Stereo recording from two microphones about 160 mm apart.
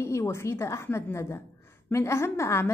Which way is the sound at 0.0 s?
15° left (ahead or behind).